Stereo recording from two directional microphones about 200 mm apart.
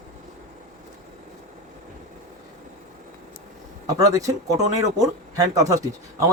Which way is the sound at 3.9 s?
15° right (ahead or behind).